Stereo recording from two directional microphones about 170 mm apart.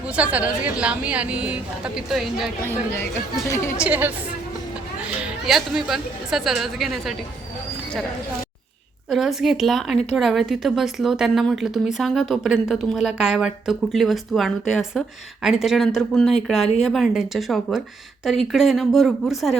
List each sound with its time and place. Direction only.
0.2 s a woman's voice: 10° right (ahead or behind)
3.5 s a woman's voice: 15° left (ahead or behind)
3.8 s a woman's voice: 10° right (ahead or behind)
9.0 s speech: centre (ahead or behind)